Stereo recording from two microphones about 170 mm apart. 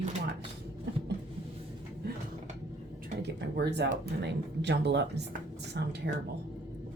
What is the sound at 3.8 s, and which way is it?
Speech, 85° right.